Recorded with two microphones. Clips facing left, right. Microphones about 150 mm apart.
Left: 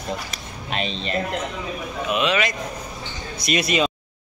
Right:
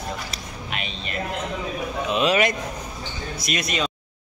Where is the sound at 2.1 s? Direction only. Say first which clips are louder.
Right 1 dB; 40° right (ahead or behind).